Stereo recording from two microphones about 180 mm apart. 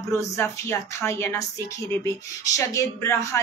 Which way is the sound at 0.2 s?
15° left (ahead or behind).